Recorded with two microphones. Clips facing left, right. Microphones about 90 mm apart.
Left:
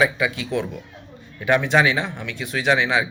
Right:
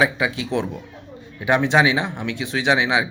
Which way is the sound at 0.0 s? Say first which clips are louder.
Even; 25° right (ahead or behind).